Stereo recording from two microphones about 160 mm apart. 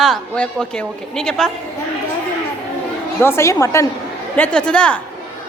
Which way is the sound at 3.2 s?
15° left (ahead or behind).